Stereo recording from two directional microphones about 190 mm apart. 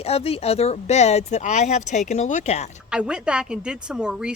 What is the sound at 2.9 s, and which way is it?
A woman's voice, 5° right (ahead or behind).